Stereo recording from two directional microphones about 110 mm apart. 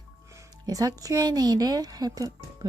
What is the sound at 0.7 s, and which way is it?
A woman's voice, 35° right (ahead or behind).